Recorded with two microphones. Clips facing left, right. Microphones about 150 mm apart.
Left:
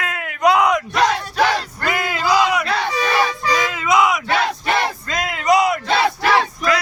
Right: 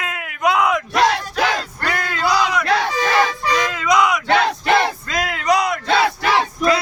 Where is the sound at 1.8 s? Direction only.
5° left (ahead or behind).